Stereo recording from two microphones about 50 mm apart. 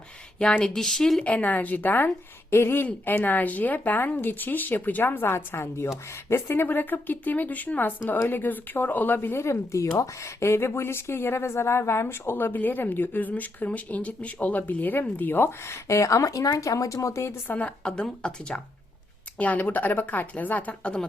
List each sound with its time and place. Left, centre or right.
0.6 s speech: centre
1.2 s speech: left
2.5 s speech: left
2.8 s speech: left
12.3 s speech: left
17.5 s speech: left
17.8 s speech: centre
19.4 s speech: left